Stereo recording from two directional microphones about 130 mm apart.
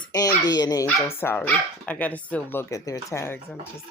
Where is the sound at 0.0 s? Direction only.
30° left (ahead or behind).